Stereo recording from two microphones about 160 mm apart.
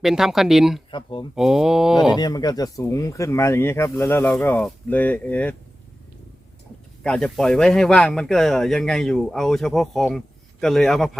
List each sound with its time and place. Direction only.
0.0 s speech: centre (ahead or behind)
0.9 s speech: 30° left (ahead or behind)
1.4 s speech: 5° right (ahead or behind)
2.1 s speech: 25° left (ahead or behind); by 5.5 s 10° left (ahead or behind)
7.0 s speech: 5° left (ahead or behind)